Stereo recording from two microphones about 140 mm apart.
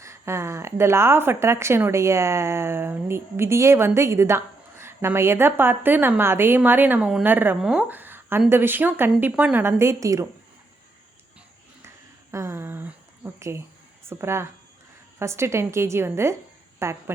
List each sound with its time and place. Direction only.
0.0 s speech: 20° right (ahead or behind)
12.3 s a sound: 20° right (ahead or behind)
14.1 s a woman's voice: 20° right (ahead or behind)